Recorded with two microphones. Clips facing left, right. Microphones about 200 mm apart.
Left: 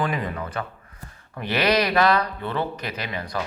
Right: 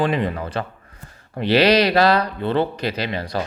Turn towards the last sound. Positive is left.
turn(degrees=-30)  # may be behind; listen again after turning